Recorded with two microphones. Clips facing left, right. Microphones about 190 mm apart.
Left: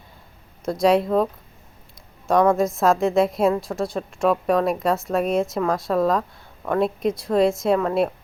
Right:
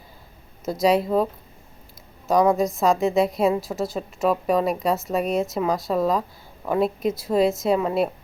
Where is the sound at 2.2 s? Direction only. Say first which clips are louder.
Left 1 dB; centre (ahead or behind).